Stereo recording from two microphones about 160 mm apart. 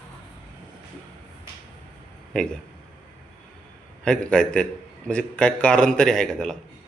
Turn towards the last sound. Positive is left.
turn(degrees=5)  # may be behind; listen again after turning